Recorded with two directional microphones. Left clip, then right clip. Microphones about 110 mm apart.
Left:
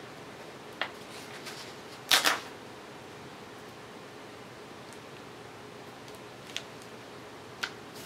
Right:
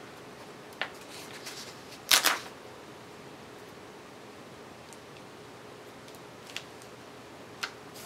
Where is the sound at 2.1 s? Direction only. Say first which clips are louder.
Right 1 dB; 15° right (ahead or behind).